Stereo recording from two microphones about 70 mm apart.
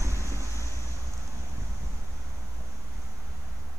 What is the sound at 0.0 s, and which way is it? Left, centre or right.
Vehicle, right.